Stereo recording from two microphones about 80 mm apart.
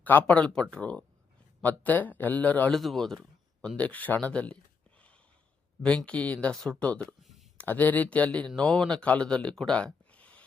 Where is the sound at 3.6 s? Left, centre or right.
Centre.